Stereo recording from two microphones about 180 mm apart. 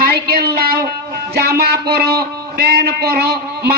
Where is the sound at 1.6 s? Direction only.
60° right (ahead or behind).